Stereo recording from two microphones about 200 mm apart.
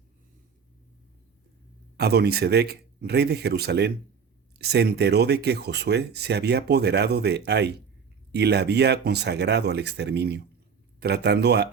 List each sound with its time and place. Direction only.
2.0 s speech: 55° right (ahead or behind)